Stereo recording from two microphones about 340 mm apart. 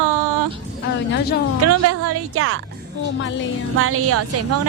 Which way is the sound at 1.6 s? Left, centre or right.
Right.